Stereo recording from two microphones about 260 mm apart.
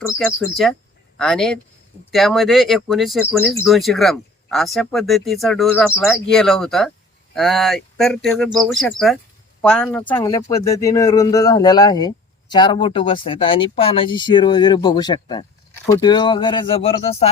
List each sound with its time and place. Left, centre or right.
0.1 s a man's voice: centre; by 17.3 s left